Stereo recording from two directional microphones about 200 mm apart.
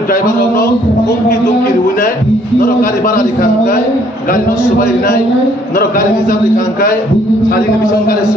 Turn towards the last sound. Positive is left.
turn(degrees=45)  # may be behind; listen again after turning